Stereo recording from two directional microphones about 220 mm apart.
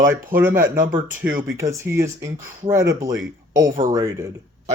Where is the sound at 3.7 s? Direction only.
40° right (ahead or behind).